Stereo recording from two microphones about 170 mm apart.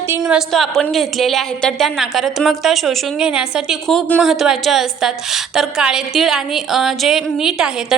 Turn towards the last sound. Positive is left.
turn(degrees=-5)  # may be behind; listen again after turning